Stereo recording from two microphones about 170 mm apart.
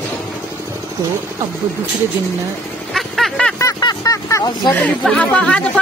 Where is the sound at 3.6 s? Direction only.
20° left (ahead or behind).